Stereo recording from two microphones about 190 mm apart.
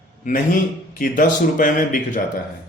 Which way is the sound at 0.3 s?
40° left (ahead or behind).